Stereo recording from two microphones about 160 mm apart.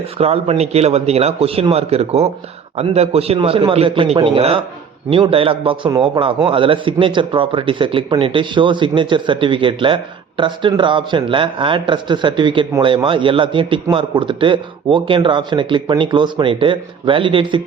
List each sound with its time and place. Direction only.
0.2 s a man's voice: 40° right (ahead or behind)